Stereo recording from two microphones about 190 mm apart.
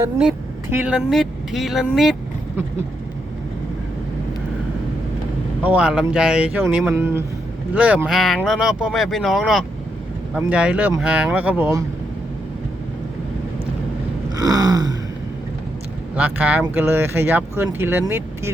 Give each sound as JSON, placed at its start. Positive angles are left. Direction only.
{"t": 0.2, "sound": "speech", "side_deg": -5}
{"t": 5.6, "sound": "speech", "side_deg": -5}
{"t": 14.3, "sound": "a sound", "side_deg": -20}
{"t": 16.1, "sound": "speech", "side_deg": -10}